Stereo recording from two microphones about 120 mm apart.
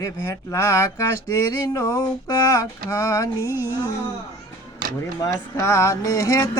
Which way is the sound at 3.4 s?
20° right (ahead or behind).